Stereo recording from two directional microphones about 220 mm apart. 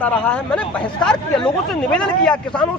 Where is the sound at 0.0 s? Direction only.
5° left (ahead or behind).